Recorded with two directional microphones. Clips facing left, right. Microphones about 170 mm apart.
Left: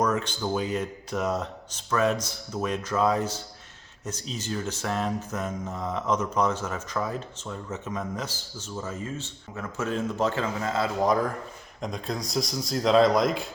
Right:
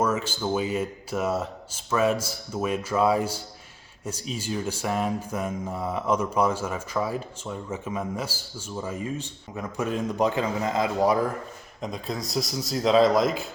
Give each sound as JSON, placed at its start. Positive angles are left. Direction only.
{"t": 0.0, "sound": "speech", "side_deg": -5}
{"t": 11.8, "sound": "speech", "side_deg": 0}